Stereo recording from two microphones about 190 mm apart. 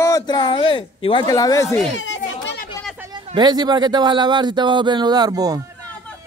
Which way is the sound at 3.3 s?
20° right (ahead or behind).